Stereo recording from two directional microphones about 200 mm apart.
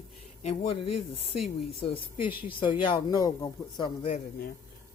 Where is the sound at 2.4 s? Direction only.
25° left (ahead or behind).